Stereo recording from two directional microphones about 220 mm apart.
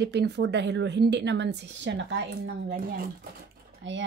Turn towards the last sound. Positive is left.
turn(degrees=-55)  # may be behind; listen again after turning